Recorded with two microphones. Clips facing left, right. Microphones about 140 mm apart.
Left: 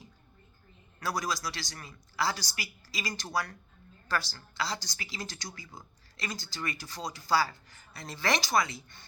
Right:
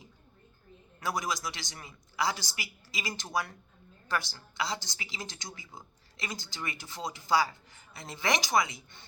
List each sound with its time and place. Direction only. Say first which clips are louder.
0.9 s speech: even; 20° right (ahead or behind)